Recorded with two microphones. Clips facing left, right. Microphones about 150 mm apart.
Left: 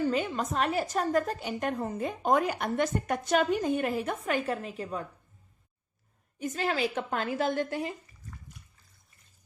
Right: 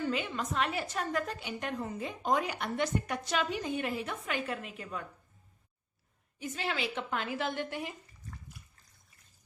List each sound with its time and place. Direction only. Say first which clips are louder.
0.0 s a woman's voice: left 5 dB; 40° left (ahead or behind)
6.4 s a woman's voice: left 6 dB; 45° left (ahead or behind)